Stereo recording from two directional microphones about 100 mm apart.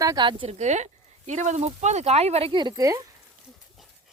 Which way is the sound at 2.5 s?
45° right (ahead or behind).